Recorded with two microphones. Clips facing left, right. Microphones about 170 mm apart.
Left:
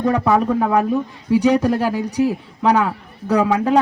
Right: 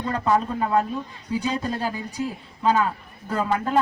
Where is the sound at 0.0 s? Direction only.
80° left.